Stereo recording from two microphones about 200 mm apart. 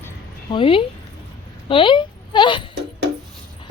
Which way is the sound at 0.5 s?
25° left (ahead or behind).